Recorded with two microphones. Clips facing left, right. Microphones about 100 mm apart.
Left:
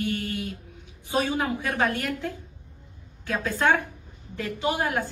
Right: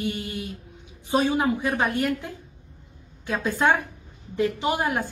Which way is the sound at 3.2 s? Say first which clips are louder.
Right 2 dB; 20° right (ahead or behind).